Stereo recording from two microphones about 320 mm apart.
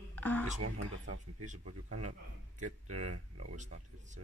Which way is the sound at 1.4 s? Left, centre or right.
Right.